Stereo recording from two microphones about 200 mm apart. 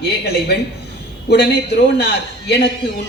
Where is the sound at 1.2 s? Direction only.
55° left (ahead or behind).